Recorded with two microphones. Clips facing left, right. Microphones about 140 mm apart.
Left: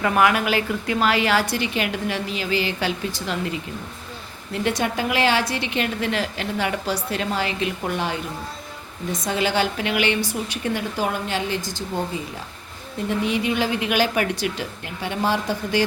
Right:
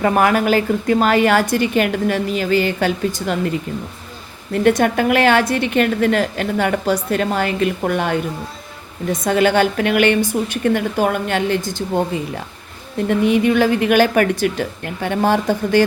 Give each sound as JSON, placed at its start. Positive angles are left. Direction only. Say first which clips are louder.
{"t": 0.0, "sound": "a woman's voice", "louder": "right 4 dB", "side_deg": -40}
{"t": 4.5, "sound": "a woman's voice", "louder": "right 9 dB", "side_deg": -55}
{"t": 9.2, "sound": "a woman's voice", "louder": "right 7 dB", "side_deg": -55}